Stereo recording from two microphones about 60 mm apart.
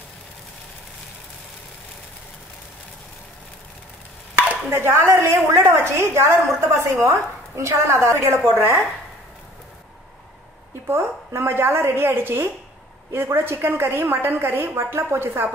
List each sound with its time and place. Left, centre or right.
4.6 s a woman's voice: right
10.9 s a woman's voice: right